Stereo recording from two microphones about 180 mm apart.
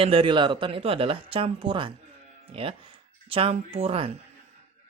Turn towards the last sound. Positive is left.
turn(degrees=-30)  # may be behind; listen again after turning